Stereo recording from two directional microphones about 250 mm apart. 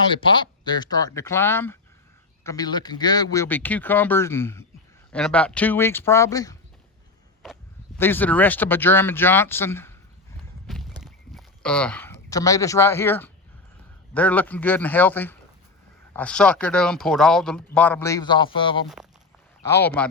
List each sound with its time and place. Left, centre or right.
0.1 s speech: centre
7.4 s a sound: centre
7.9 s speech: centre
10.7 s walk: centre
11.0 s a sound: centre
14.1 s speech: centre
19.6 s speech: centre